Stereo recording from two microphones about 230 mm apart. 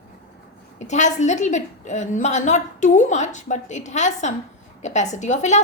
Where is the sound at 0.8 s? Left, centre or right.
Left.